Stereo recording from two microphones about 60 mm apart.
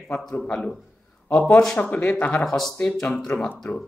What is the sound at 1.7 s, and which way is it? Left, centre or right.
Speech, left.